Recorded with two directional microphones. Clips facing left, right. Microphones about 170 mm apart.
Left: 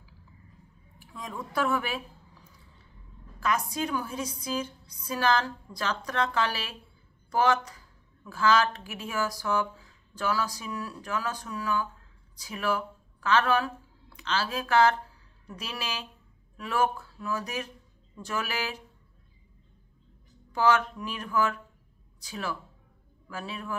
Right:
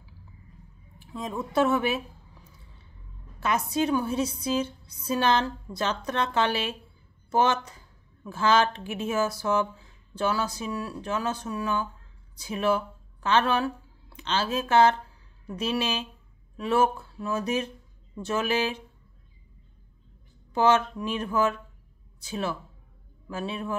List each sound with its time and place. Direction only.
0.9 s a woman's voice: 25° right (ahead or behind)
3.3 s a woman's voice: 25° right (ahead or behind)
20.5 s a woman's voice: 25° right (ahead or behind)